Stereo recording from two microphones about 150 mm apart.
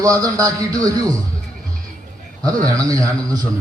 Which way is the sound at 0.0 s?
20° right (ahead or behind).